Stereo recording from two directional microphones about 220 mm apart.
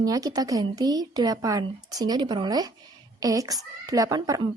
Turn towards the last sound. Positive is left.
turn(degrees=-15)  # may be behind; listen again after turning